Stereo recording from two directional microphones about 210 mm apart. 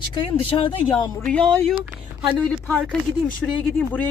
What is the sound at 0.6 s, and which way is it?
Speech, 25° left (ahead or behind).